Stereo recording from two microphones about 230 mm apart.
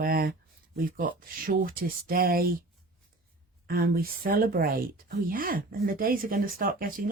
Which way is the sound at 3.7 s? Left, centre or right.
Right.